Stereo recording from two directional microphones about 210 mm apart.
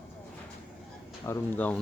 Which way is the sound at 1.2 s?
10° left (ahead or behind).